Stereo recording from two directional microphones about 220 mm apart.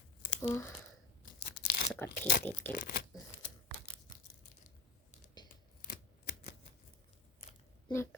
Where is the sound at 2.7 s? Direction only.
40° left (ahead or behind).